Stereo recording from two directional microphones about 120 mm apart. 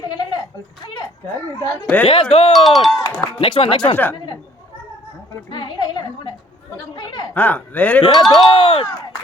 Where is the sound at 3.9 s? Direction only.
15° left (ahead or behind).